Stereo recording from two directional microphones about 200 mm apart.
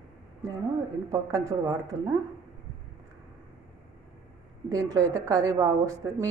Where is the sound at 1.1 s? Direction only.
15° right (ahead or behind).